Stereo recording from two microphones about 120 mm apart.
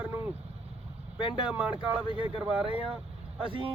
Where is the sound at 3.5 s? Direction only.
45° right (ahead or behind).